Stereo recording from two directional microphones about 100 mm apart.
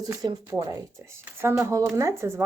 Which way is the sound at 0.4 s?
30° right (ahead or behind).